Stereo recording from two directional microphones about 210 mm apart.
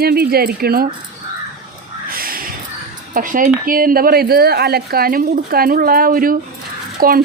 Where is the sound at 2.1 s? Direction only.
45° right (ahead or behind).